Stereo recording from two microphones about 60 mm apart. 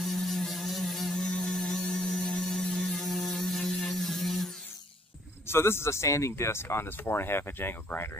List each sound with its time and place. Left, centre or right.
0.0 s a sound: centre
5.5 s speech: left
6.3 s speech: left